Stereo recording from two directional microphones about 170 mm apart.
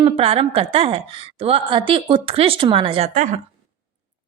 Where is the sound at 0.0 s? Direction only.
35° right (ahead or behind).